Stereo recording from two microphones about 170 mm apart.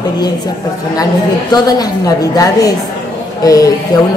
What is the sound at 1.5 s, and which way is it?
A man's voice, 20° left (ahead or behind).